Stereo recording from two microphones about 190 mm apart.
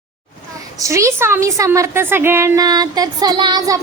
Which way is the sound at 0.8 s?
15° right (ahead or behind).